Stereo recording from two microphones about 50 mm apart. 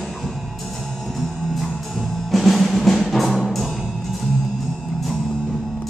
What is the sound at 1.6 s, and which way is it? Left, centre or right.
Music, centre.